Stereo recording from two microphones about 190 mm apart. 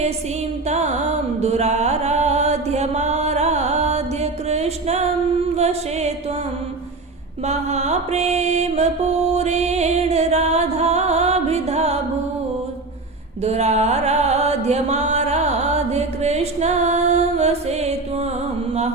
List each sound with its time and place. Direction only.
0.7 s music: 35° right (ahead or behind)
5.5 s mantra: 35° right (ahead or behind)
7.4 s mantra: 35° right (ahead or behind)
9.3 s music: 35° right (ahead or behind)
13.4 s music: 35° right (ahead or behind)